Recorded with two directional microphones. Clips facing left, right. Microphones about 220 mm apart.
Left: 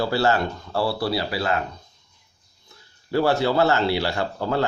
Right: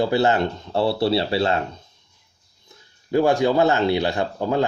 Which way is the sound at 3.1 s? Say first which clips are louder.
Right 3 dB; 15° right (ahead or behind).